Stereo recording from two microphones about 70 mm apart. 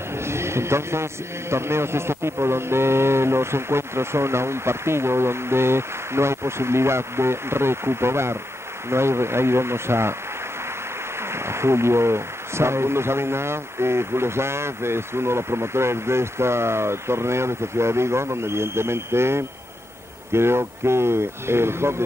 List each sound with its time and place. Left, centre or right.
0.2 s a sound: right
1.5 s speech: right
11.3 s speech: right